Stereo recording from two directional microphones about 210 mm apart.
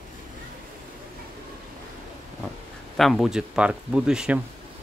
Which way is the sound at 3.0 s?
Centre (ahead or behind).